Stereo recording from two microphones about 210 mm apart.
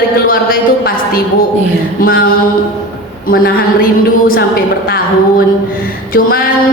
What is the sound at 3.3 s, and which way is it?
A woman's voice, 45° left (ahead or behind).